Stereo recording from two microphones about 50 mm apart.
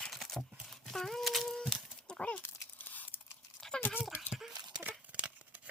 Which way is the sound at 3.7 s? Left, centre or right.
Centre.